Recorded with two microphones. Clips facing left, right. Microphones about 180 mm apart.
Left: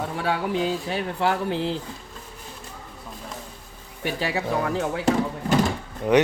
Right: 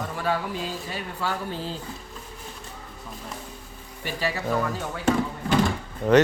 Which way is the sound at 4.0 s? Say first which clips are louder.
Left 2 dB; 65° left (ahead or behind).